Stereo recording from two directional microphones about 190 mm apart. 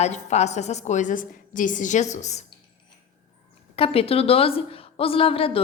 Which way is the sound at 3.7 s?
30° left (ahead or behind).